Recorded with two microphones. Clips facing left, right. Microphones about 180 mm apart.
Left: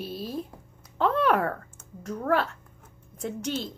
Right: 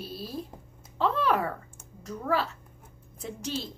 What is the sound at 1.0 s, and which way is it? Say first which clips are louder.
A woman's voice: left 3 dB; 5° right (ahead or behind).